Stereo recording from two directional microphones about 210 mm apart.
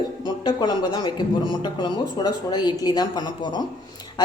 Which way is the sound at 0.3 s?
20° left (ahead or behind).